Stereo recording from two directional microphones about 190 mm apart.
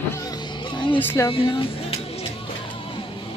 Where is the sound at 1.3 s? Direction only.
25° left (ahead or behind).